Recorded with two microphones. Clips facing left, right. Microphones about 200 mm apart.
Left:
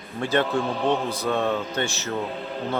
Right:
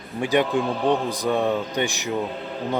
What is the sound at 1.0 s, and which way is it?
Speech, 15° right (ahead or behind).